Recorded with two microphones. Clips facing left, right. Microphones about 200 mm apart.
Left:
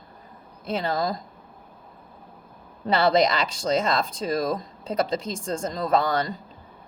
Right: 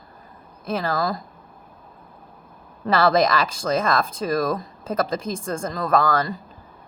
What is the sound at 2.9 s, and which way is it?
A woman's voice, 20° left (ahead or behind).